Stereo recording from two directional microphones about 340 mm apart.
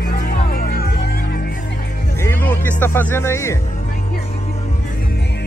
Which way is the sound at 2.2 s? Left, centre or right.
Centre.